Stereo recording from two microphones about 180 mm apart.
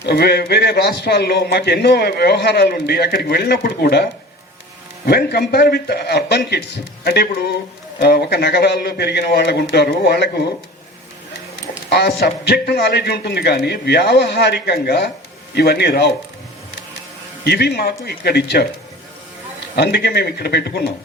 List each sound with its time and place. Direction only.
0.0 s speech: 65° left (ahead or behind)
11.9 s speech: 65° left (ahead or behind)
17.4 s speech: 65° left (ahead or behind)